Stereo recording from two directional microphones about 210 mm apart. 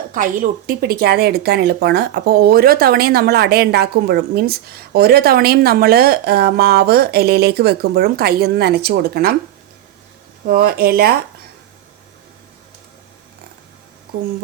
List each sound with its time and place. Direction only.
0.1 s speech: 40° right (ahead or behind)
10.4 s speech: 45° right (ahead or behind)